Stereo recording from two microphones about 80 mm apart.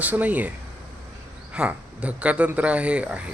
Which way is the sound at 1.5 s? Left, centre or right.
Centre.